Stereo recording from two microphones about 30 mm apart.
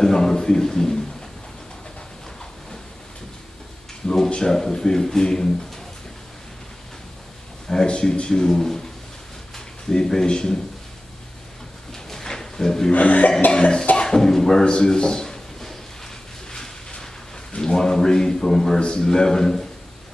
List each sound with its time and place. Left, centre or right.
0.0 s a sound: centre
4.5 s speech: centre
7.6 s a man's voice: centre
9.9 s speech: left
11.9 s drawer open or close: centre
12.9 s speech: left
13.5 s cough: left
13.9 s speech: left
17.6 s speech: left